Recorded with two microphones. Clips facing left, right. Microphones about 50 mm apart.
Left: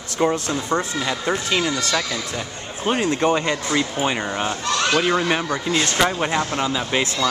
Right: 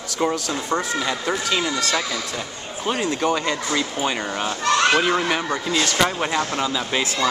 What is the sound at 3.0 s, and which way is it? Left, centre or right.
Speech, left.